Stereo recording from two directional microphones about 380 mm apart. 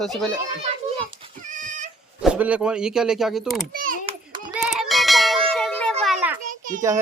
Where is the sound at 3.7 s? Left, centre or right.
Right.